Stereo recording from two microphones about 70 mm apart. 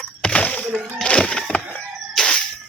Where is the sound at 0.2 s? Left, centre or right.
Centre.